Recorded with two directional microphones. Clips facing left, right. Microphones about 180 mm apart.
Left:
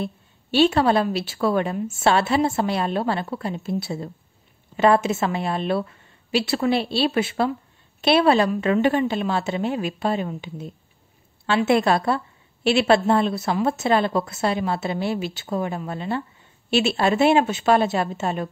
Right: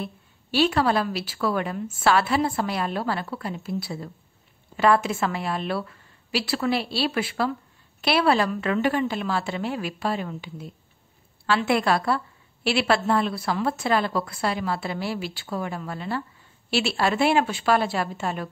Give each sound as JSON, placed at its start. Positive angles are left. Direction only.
{"t": 0.0, "sound": "a woman's voice", "side_deg": 25}